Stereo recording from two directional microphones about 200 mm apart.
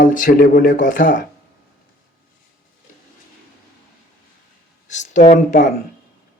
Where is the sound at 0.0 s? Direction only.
40° left (ahead or behind).